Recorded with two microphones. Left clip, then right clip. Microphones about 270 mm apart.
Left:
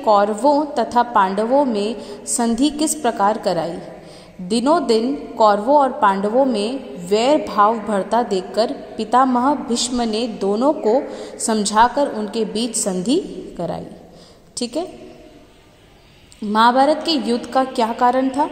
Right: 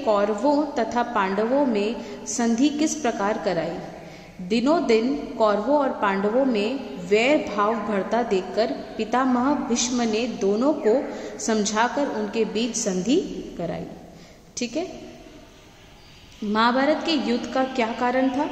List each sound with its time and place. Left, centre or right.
0.0 s a woman's voice: left
16.5 s a woman's voice: left